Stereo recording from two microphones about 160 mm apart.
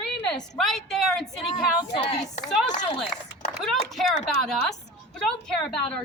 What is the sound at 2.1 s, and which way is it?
Speech, 45° left (ahead or behind).